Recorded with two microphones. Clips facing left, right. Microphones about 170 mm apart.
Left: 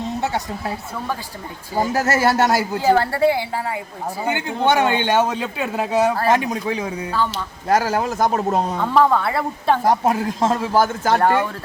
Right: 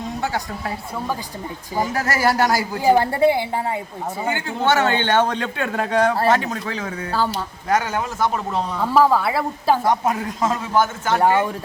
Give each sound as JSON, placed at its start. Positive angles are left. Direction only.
{"t": 0.2, "sound": "a man's voice", "side_deg": 25}
{"t": 1.9, "sound": "a man's voice", "side_deg": 25}
{"t": 2.8, "sound": "a woman's voice", "side_deg": -15}
{"t": 4.3, "sound": "a man's voice", "side_deg": 15}
{"t": 7.1, "sound": "speech", "side_deg": -35}
{"t": 7.7, "sound": "speech", "side_deg": 35}
{"t": 8.8, "sound": "a woman's voice", "side_deg": -5}
{"t": 9.9, "sound": "speech", "side_deg": 30}
{"t": 11.2, "sound": "speech", "side_deg": -10}